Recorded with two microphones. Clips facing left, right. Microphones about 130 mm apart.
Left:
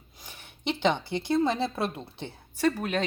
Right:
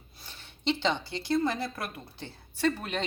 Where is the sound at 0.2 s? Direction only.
15° left (ahead or behind).